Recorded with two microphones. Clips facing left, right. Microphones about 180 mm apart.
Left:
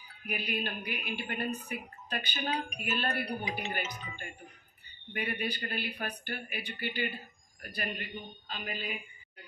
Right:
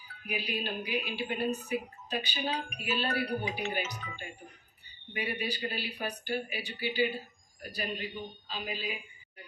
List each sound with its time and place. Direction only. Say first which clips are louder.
0.3 s speech: even; 55° left (ahead or behind)
5.1 s a man's voice: even; 55° left (ahead or behind)